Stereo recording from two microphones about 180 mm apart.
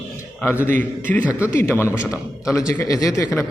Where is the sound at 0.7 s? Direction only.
45° right (ahead or behind).